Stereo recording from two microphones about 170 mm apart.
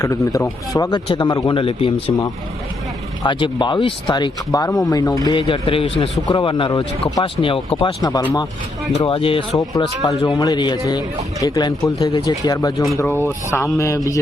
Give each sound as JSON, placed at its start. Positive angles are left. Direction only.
{"t": 0.0, "sound": "speech", "side_deg": 20}
{"t": 3.2, "sound": "speech", "side_deg": 25}